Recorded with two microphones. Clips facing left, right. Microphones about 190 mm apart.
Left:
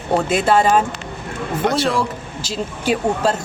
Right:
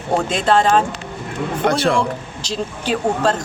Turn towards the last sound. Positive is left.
turn(degrees=10)  # may be behind; listen again after turning